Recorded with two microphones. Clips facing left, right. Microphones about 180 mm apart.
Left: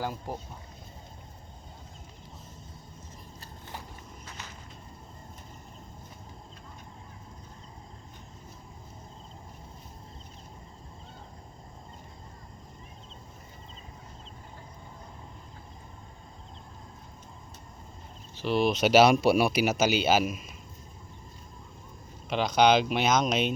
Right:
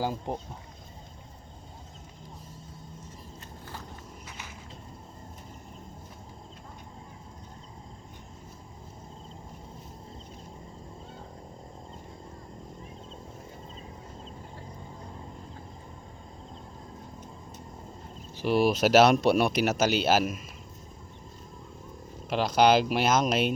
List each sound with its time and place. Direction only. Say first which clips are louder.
0.0 s speech: right 3 dB; 20° right (ahead or behind)
4.3 s walk: left 1 dB; 10° right (ahead or behind)
18.4 s speech: right 2 dB; 10° right (ahead or behind)
22.3 s speech: right 1 dB; 5° right (ahead or behind)